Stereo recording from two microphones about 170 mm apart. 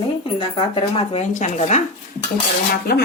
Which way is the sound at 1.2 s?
45° left (ahead or behind).